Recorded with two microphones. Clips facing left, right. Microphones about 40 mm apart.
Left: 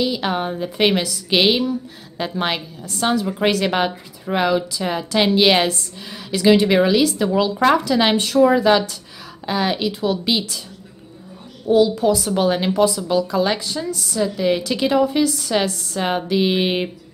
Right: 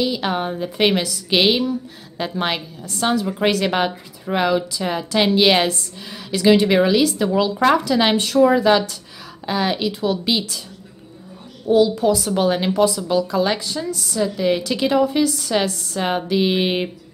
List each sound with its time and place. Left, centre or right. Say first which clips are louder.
0.0 s a woman's voice: even; centre
11.6 s a woman's voice: even; centre